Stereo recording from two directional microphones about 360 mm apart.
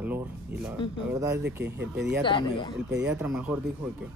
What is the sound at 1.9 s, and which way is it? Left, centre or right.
Speech, right.